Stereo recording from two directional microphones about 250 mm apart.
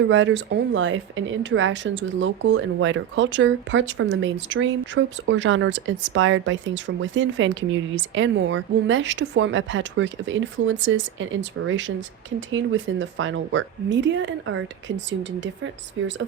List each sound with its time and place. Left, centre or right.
0.1 s speech: right